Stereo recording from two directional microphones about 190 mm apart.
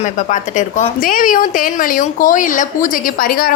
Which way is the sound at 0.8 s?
45° left (ahead or behind).